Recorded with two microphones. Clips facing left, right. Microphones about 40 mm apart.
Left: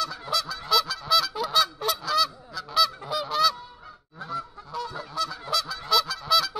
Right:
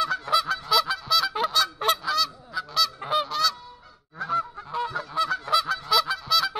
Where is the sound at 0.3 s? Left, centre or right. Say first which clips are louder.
Right 5 dB; right.